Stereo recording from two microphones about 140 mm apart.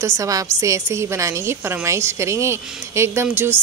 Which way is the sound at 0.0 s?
25° right (ahead or behind).